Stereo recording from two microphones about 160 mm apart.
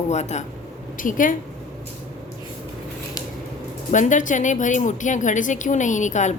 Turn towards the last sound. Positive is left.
turn(degrees=50)  # may be behind; listen again after turning